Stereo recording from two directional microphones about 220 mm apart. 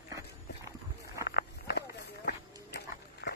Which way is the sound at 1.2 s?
50° left (ahead or behind).